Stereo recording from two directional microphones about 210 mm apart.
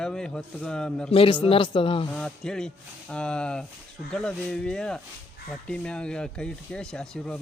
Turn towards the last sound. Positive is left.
turn(degrees=5)  # may be behind; listen again after turning